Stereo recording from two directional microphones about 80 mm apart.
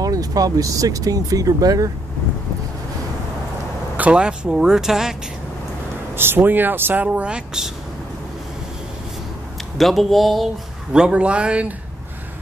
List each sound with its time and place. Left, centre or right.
0.0 s speech: right
3.9 s speech: centre
6.1 s speech: right; by 7.7 s centre
9.8 s speech: centre
10.9 s speech: centre